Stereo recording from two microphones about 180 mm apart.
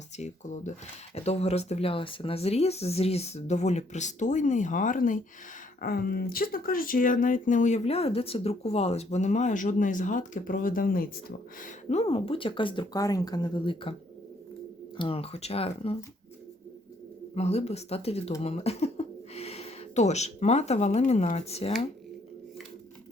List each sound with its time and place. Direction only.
0.2 s speech: 40° left (ahead or behind)
5.8 s speech: 55° left (ahead or behind)
11.6 s speech: 40° left (ahead or behind)
14.9 s speech: 30° left (ahead or behind)
17.3 s speech: 35° left (ahead or behind)